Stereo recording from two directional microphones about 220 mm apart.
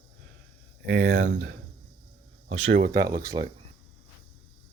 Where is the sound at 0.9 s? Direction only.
55° right (ahead or behind).